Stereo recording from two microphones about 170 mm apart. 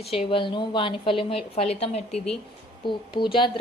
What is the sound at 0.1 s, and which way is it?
A woman's voice, 35° left (ahead or behind).